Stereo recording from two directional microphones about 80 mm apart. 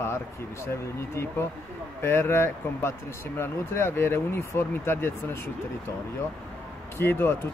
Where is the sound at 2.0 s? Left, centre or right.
Left.